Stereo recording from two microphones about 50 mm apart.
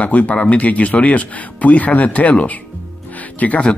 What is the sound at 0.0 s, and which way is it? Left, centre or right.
Speech, left.